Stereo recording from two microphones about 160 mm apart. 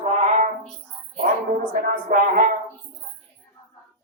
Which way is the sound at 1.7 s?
60° right (ahead or behind).